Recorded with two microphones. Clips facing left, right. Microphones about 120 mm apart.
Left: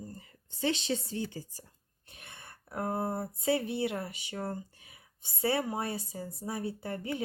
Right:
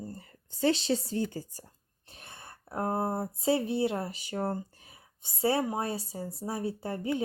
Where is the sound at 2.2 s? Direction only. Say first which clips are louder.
Right 3 dB; 25° right (ahead or behind).